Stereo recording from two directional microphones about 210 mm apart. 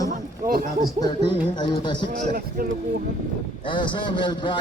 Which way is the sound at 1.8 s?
20° left (ahead or behind).